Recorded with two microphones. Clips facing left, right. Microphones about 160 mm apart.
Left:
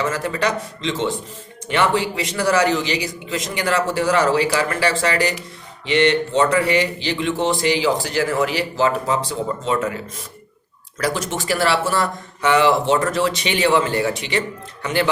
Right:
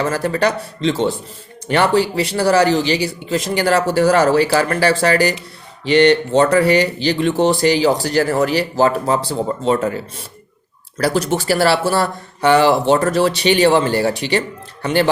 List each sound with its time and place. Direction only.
0.0 s speech: 35° right (ahead or behind)